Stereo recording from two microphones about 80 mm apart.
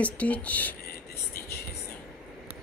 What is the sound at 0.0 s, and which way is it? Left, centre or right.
Speech, centre.